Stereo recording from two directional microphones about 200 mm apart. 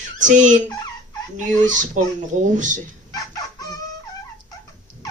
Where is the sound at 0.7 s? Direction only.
20° left (ahead or behind).